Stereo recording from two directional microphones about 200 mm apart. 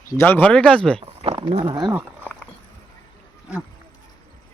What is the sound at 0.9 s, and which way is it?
Speech, 30° right (ahead or behind).